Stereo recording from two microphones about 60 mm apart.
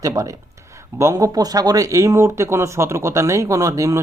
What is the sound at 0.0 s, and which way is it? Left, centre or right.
Speech, right.